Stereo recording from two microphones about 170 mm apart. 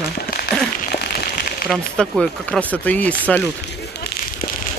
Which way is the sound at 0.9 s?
65° left (ahead or behind).